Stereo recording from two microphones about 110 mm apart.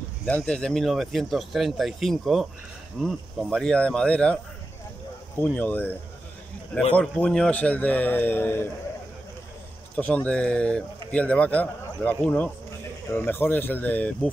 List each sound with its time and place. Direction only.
0.2 s a man's voice: 10° left (ahead or behind)
5.4 s a man's voice: 15° left (ahead or behind)
7.0 s a man's voice: 10° left (ahead or behind)
9.9 s a man's voice: 15° left (ahead or behind)